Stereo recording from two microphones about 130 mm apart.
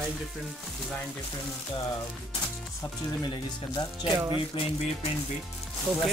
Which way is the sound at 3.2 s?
35° left (ahead or behind).